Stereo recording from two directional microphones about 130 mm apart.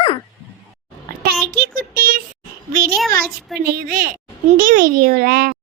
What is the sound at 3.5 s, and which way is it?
Speech, centre (ahead or behind).